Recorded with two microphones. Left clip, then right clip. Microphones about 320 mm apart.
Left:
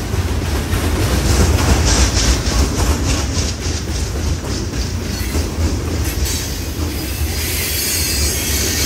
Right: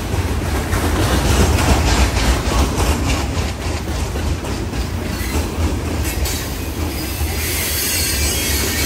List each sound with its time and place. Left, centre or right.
1.1 s train: centre